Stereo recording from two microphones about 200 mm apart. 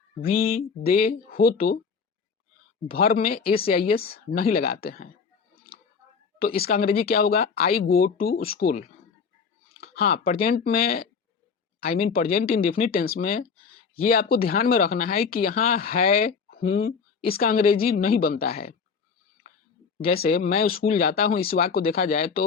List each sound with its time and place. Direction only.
0.3 s speech: 45° left (ahead or behind)
2.8 s speech: 30° left (ahead or behind)
3.1 s speech: 45° left (ahead or behind)
6.6 s speech: 50° left (ahead or behind)
9.8 s speech: 50° left (ahead or behind)
20.0 s speech: 50° left (ahead or behind)